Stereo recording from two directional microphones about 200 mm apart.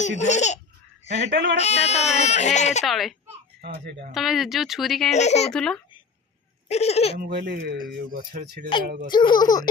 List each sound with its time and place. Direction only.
0.0 s speech: 35° left (ahead or behind)
1.3 s speech: 55° right (ahead or behind)
1.5 s speech: 35° left (ahead or behind)
2.8 s speech: centre (ahead or behind)
3.6 s speech: 55° right (ahead or behind)
4.1 s speech: centre (ahead or behind)
5.1 s speech: 35° left (ahead or behind)
5.5 s speech: 5° left (ahead or behind)
6.7 s speech: 30° left (ahead or behind)
7.2 s speech: 50° right (ahead or behind)
9.1 s speech: 20° left (ahead or behind)